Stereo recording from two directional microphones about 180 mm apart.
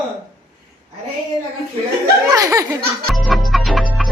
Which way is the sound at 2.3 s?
20° right (ahead or behind).